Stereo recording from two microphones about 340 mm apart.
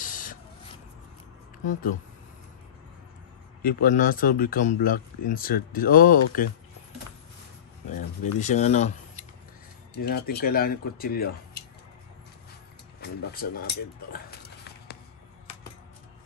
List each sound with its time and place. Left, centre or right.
0.0 s a sound: left
1.7 s speech: left
3.6 s speech: left
8.4 s speech: left
10.0 s speech: left
13.0 s speech: left
14.9 s a sound: left